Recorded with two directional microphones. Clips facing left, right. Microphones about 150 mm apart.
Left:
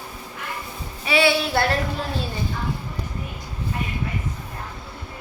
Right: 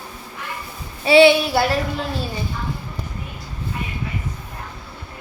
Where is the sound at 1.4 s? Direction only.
5° right (ahead or behind).